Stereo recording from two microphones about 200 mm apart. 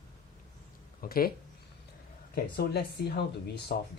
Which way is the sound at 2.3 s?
55° left (ahead or behind).